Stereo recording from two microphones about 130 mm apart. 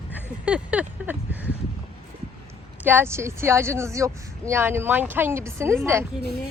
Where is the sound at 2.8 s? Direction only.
15° right (ahead or behind).